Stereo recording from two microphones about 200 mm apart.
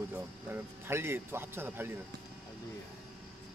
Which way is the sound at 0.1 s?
10° right (ahead or behind).